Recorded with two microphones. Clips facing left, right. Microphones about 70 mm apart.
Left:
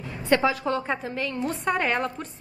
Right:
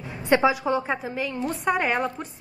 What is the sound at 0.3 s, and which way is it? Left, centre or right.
A woman's voice, centre.